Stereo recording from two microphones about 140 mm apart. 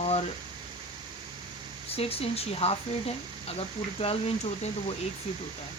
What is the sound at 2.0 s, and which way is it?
Speech, 45° left (ahead or behind).